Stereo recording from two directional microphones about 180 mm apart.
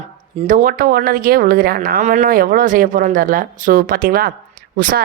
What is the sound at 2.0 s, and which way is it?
A woman's voice, 40° right (ahead or behind).